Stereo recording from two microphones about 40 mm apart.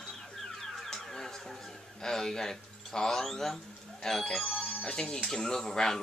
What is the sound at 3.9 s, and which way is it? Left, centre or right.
Speech, centre.